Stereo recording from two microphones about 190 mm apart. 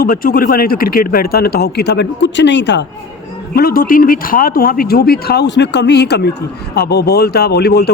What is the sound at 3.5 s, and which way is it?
Speech, 50° left (ahead or behind).